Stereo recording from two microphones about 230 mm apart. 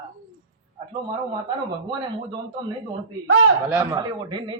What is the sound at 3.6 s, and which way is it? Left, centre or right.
Speech, centre.